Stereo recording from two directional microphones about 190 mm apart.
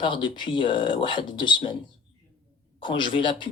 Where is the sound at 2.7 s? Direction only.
25° left (ahead or behind).